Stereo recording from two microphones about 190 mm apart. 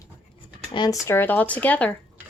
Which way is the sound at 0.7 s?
25° left (ahead or behind).